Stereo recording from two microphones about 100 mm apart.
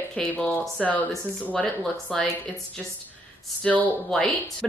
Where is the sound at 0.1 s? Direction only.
10° left (ahead or behind).